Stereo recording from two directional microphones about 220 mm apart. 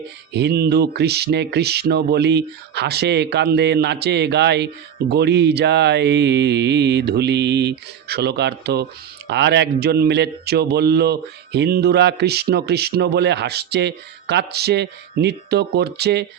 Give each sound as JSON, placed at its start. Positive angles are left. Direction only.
{"t": 0.3, "sound": "speech", "side_deg": -45}